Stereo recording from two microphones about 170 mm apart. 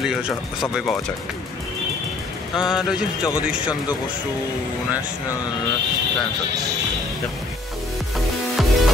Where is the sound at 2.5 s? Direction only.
5° right (ahead or behind).